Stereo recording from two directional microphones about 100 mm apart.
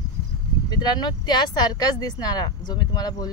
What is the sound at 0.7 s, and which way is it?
Speech, 45° left (ahead or behind).